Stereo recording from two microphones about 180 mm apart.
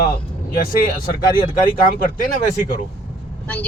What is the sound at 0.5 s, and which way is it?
Speech, 50° left (ahead or behind).